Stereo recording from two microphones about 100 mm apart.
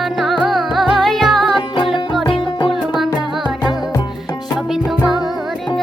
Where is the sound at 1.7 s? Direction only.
55° left (ahead or behind).